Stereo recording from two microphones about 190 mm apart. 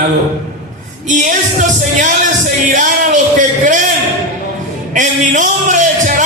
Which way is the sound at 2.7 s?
40° right (ahead or behind).